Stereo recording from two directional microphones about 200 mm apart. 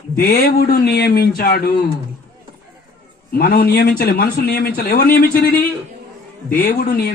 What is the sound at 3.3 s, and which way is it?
Speech, 50° left (ahead or behind).